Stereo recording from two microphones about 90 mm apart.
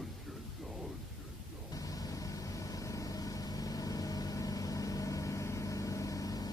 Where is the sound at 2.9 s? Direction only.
45° left (ahead or behind).